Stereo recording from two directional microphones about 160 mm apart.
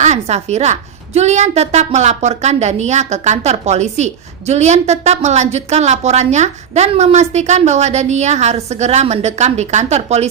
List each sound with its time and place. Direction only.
0.0 s a woman's voice: 45° right (ahead or behind)